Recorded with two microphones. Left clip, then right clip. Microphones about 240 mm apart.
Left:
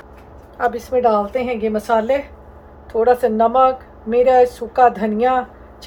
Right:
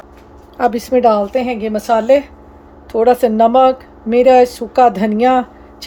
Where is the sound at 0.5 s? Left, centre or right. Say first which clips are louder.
Right 4 dB; right.